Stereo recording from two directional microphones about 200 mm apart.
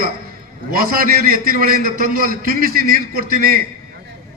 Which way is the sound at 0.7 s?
45° right (ahead or behind).